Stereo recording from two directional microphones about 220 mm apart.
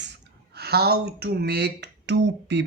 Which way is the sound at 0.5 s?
45° right (ahead or behind).